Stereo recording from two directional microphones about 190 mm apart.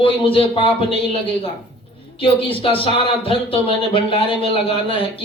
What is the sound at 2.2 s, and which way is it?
A man's voice, 30° left (ahead or behind).